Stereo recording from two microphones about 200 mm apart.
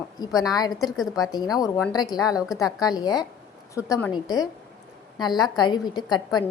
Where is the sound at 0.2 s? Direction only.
20° left (ahead or behind).